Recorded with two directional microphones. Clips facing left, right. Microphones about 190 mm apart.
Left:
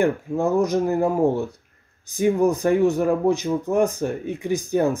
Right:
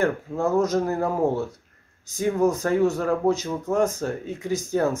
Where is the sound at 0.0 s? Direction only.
15° left (ahead or behind).